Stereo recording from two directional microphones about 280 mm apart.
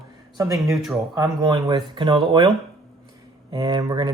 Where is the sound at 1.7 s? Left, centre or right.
Centre.